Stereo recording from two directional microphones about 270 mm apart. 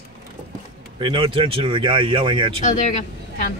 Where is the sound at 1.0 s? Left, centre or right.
Centre.